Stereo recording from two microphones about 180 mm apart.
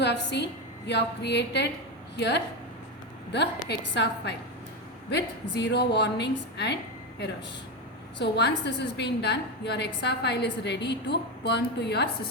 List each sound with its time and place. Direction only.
0.0 s a woman's voice: 75° left (ahead or behind)
8.2 s a woman's voice: 70° left (ahead or behind)